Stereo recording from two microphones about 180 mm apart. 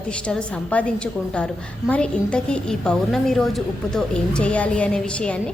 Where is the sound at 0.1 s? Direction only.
5° left (ahead or behind).